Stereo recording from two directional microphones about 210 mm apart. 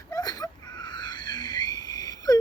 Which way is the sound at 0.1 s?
15° left (ahead or behind).